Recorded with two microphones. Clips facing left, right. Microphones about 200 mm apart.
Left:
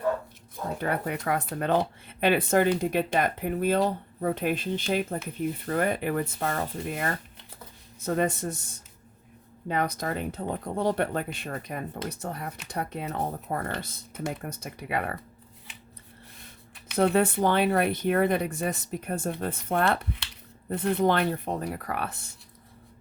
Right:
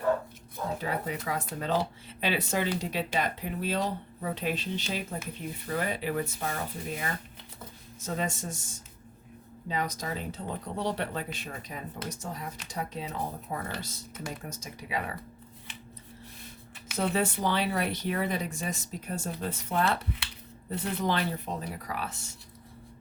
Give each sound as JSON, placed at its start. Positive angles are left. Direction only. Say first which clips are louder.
{"t": 0.8, "sound": "speech", "louder": "left 4 dB", "side_deg": 60}
{"t": 17.0, "sound": "speech", "louder": "left 6 dB", "side_deg": 60}